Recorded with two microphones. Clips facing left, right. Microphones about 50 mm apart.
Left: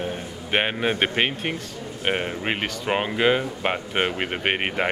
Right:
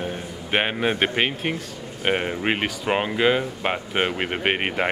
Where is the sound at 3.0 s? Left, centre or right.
Centre.